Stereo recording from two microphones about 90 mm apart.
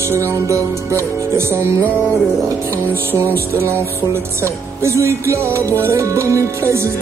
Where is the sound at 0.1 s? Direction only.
35° right (ahead or behind).